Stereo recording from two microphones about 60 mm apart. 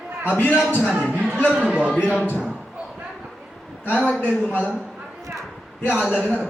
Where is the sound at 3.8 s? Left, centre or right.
Left.